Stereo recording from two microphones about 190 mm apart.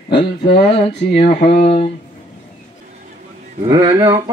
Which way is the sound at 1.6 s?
30° left (ahead or behind).